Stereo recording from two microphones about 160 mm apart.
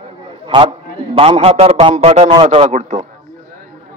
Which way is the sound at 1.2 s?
35° right (ahead or behind).